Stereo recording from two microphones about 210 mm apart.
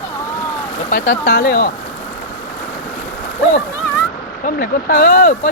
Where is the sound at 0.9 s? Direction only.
40° left (ahead or behind).